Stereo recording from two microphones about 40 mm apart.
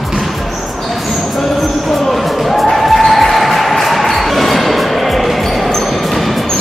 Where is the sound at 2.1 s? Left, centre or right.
Centre.